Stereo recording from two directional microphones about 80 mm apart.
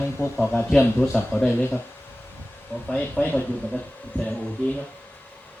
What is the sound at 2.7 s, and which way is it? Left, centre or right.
Speech, left.